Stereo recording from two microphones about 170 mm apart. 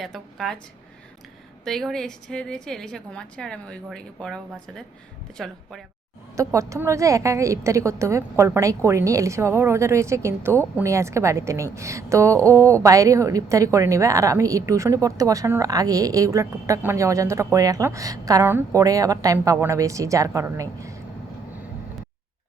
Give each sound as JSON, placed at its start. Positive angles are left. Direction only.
{"t": 0.0, "sound": "a woman's voice", "side_deg": 0}
{"t": 1.6, "sound": "a woman's voice", "side_deg": 0}
{"t": 5.4, "sound": "a woman's voice", "side_deg": 0}
{"t": 6.3, "sound": "a woman's voice", "side_deg": -20}